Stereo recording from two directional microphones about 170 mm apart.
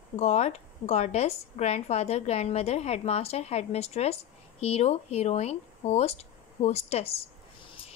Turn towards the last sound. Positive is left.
turn(degrees=40)  # may be behind; listen again after turning